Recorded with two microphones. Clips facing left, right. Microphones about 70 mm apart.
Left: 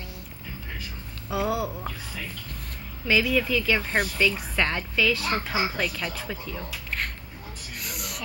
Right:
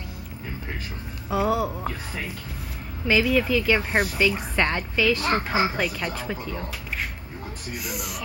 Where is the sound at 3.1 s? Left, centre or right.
Centre.